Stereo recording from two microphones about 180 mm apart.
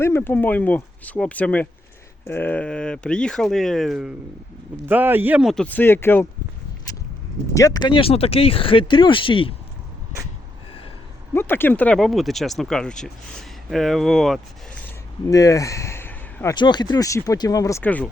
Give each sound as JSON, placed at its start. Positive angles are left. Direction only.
{"t": 0.0, "sound": "speech", "side_deg": 10}
{"t": 6.9, "sound": "a sound", "side_deg": 20}
{"t": 7.5, "sound": "speech", "side_deg": 20}
{"t": 11.3, "sound": "speech", "side_deg": 10}
{"t": 14.8, "sound": "a sound", "side_deg": 15}
{"t": 16.6, "sound": "speech", "side_deg": 25}